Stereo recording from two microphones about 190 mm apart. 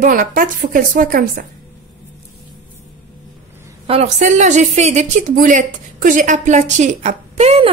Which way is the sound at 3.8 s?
35° right (ahead or behind).